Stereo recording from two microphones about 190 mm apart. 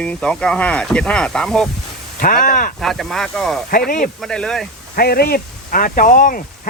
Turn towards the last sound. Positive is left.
turn(degrees=45)  # may be behind; listen again after turning